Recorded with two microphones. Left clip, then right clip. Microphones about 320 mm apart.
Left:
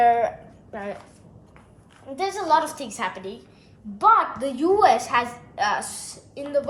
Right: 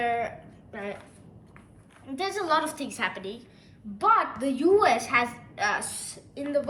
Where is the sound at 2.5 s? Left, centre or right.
Centre.